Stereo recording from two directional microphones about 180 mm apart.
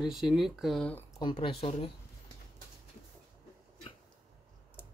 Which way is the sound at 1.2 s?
30° left (ahead or behind).